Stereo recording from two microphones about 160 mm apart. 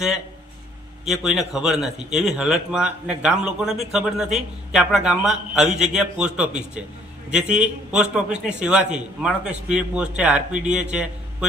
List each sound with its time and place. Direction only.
1.0 s a man's voice: centre (ahead or behind)